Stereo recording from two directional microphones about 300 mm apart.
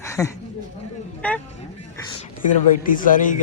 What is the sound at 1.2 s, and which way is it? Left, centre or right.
Speech, centre.